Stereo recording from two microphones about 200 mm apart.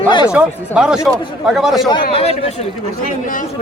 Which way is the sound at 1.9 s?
25° left (ahead or behind).